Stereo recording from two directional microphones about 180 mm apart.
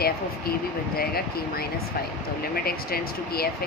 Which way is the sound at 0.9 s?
60° left (ahead or behind).